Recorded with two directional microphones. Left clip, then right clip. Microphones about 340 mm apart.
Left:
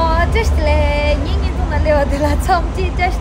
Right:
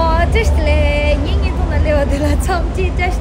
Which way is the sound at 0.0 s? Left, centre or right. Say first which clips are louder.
Right 1 dB; centre.